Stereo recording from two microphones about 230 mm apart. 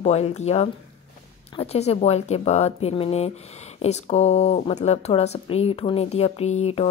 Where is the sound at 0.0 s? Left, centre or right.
Left.